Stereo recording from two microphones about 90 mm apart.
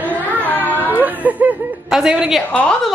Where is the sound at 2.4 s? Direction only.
15° left (ahead or behind).